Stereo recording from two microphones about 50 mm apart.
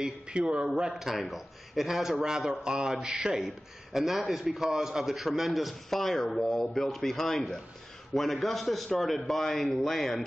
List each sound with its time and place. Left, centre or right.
0.0 s a man's voice: right
0.7 s a man's voice: centre
1.1 s a man's voice: centre